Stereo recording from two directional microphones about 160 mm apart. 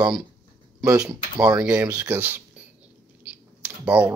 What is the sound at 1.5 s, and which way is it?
Speech, 5° right (ahead or behind).